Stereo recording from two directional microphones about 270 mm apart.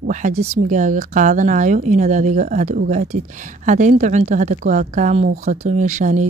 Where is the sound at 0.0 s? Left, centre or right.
Right.